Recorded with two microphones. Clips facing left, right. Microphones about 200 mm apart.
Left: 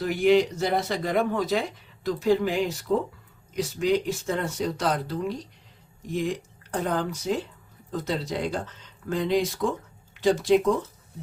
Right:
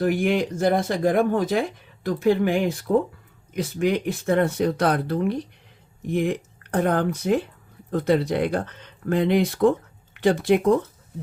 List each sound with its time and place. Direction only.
0.0 s speech: 55° right (ahead or behind)